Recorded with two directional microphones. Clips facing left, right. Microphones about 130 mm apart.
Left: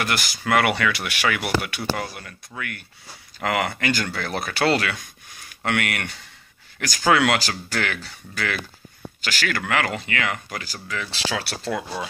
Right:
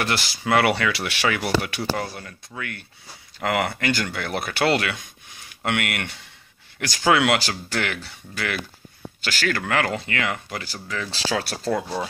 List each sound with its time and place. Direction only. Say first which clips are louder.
0.0 s speech: right 1 dB; 30° right (ahead or behind)